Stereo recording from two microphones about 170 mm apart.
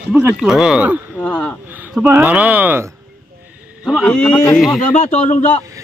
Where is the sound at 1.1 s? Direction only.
10° left (ahead or behind).